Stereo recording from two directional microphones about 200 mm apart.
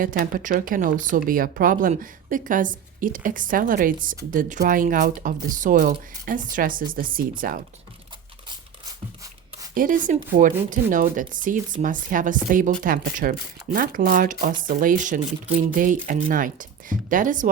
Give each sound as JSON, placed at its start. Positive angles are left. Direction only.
{"t": 0.0, "sound": "speech", "side_deg": -45}
{"t": 9.7, "sound": "speech", "side_deg": -40}